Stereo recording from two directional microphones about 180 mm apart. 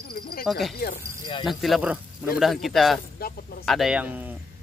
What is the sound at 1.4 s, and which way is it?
Speech, centre (ahead or behind).